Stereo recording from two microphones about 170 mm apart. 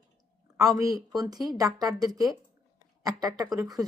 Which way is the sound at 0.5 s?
15° right (ahead or behind).